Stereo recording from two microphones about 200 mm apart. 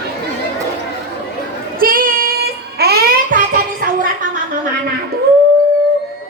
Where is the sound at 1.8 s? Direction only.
45° right (ahead or behind).